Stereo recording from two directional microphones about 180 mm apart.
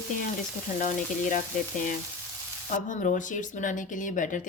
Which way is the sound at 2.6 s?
45° left (ahead or behind).